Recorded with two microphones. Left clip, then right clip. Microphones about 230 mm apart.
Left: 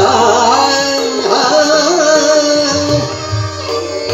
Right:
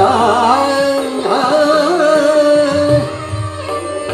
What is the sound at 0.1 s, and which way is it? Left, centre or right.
Music, right.